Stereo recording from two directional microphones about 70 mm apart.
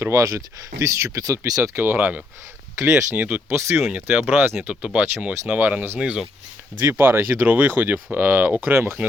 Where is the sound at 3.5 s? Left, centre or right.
Right.